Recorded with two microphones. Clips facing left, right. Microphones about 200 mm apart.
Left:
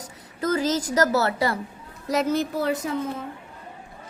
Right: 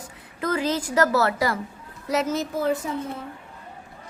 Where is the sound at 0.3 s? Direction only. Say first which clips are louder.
Left 1 dB; 40° left (ahead or behind).